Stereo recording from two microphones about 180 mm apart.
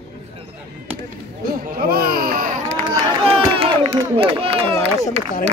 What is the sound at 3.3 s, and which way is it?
Crowd, 30° right (ahead or behind).